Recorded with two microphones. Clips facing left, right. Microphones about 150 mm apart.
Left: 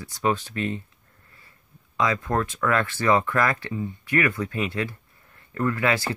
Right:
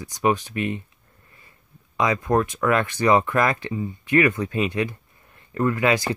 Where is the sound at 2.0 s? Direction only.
20° right (ahead or behind).